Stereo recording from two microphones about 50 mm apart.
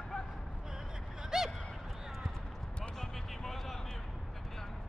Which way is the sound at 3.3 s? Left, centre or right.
Centre.